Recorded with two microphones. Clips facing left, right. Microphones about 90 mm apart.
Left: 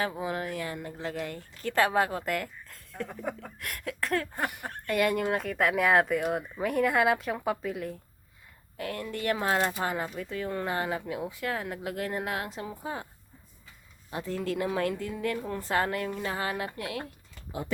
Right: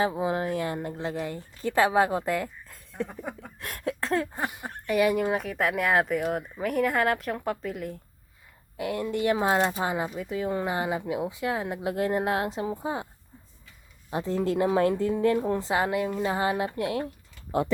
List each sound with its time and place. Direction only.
0.0 s speech: 25° right (ahead or behind)
1.3 s speech: 15° right (ahead or behind)
3.6 s speech: 30° right (ahead or behind); by 7.9 s centre (ahead or behind)
8.8 s speech: 15° right (ahead or behind)
14.1 s speech: 25° right (ahead or behind)